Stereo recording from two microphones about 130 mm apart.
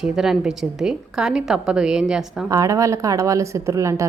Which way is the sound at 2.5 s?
25° right (ahead or behind).